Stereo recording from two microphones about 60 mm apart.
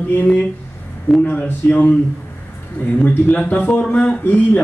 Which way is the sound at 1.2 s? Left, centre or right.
Left.